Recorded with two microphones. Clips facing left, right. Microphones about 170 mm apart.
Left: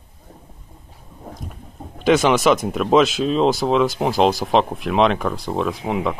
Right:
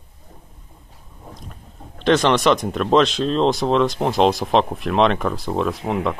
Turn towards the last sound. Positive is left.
turn(degrees=0)  # may be behind; listen again after turning